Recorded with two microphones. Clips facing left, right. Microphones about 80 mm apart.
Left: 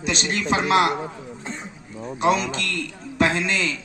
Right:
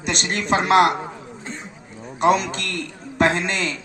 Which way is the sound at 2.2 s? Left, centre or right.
Right.